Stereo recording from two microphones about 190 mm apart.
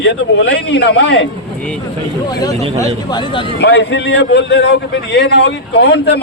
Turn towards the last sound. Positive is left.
turn(degrees=65)  # may be behind; listen again after turning